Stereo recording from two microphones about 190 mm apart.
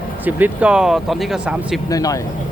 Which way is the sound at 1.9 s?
20° left (ahead or behind).